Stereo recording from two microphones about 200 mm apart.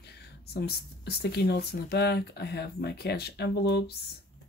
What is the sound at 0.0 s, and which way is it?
Speech, 55° left (ahead or behind).